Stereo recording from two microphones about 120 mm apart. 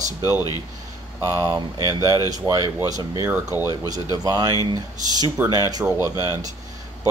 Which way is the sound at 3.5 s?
30° left (ahead or behind).